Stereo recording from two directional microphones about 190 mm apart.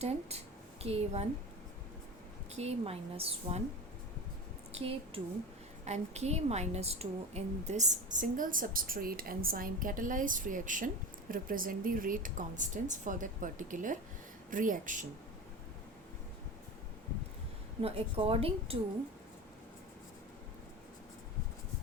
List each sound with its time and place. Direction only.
0.8 s a woman's voice: 35° right (ahead or behind)
2.6 s a woman's voice: 35° right (ahead or behind)
4.7 s a woman's voice: 30° right (ahead or behind)
17.8 s a woman's voice: 30° right (ahead or behind)